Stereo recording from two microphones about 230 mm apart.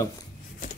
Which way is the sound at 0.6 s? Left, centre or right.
Left.